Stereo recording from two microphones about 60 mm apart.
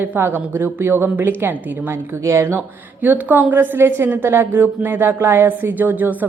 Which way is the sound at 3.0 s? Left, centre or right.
Right.